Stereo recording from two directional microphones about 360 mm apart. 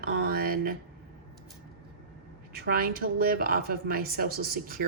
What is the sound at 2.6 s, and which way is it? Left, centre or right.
A woman's voice, right.